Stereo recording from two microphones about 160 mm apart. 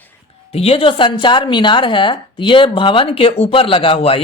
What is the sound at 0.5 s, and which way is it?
A woman's voice, 40° left (ahead or behind).